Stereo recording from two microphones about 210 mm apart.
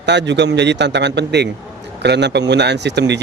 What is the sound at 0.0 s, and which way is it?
Speech, 55° right (ahead or behind).